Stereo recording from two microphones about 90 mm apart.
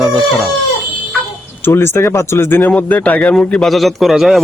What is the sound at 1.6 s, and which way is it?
A man's voice, 25° left (ahead or behind).